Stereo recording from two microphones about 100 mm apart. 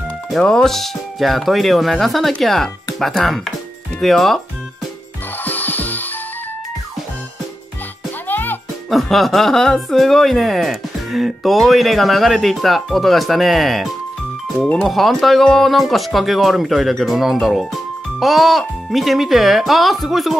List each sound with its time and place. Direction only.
0.3 s speech: 5° left (ahead or behind)
5.4 s music: 20° left (ahead or behind)
8.3 s music: 20° left (ahead or behind)
8.9 s speech: centre (ahead or behind)
14.9 s speech: centre (ahead or behind)